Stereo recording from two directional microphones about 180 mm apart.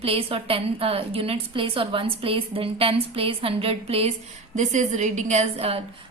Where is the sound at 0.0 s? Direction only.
30° right (ahead or behind).